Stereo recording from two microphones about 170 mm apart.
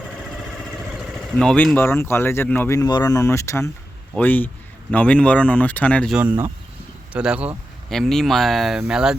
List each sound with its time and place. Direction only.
1.4 s speech: 5° left (ahead or behind)
6.1 s speech: 10° right (ahead or behind)